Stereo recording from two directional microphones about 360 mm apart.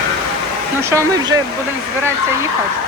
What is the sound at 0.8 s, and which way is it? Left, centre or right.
Speech, centre.